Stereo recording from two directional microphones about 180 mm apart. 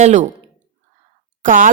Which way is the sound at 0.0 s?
40° right (ahead or behind).